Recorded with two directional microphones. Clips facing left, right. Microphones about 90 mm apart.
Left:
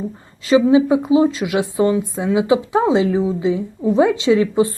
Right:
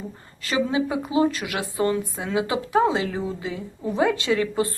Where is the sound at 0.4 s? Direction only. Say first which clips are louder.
Left 11 dB; 20° left (ahead or behind).